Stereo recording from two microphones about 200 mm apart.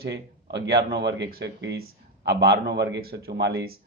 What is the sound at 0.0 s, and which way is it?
A man's voice, 60° right (ahead or behind).